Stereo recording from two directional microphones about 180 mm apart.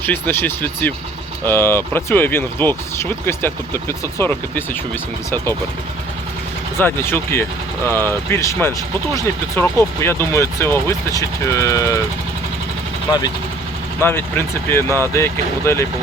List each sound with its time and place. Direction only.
0.0 s speech: 10° left (ahead or behind)
6.7 s speech: 15° left (ahead or behind)
13.1 s speech: 20° left (ahead or behind)
14.0 s speech: 10° left (ahead or behind)